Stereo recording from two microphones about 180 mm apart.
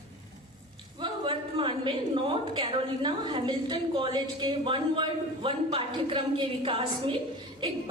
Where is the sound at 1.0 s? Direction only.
30° right (ahead or behind).